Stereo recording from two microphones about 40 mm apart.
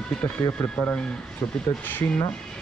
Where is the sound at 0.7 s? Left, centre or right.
Left.